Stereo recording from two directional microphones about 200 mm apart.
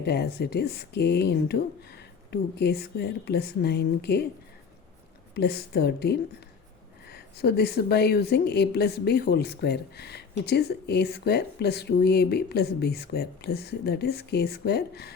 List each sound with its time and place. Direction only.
0.0 s a woman's voice: 55° left (ahead or behind)
5.3 s a woman's voice: 55° left (ahead or behind)